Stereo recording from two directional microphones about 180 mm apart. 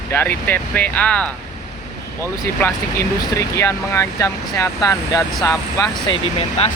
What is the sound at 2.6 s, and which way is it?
Speech, 15° left (ahead or behind).